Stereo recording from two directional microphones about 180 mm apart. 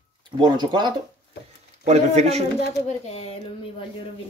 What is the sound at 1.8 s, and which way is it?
Speech, 40° right (ahead or behind).